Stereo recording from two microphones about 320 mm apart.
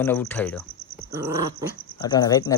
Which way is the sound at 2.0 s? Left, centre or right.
Centre.